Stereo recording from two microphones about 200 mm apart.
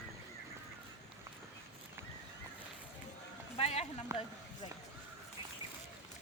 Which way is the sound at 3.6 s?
30° left (ahead or behind).